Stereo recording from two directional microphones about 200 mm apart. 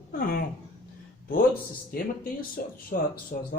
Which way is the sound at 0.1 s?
45° left (ahead or behind).